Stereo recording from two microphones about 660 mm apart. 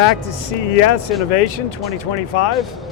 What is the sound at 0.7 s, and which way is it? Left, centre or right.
Speech, left.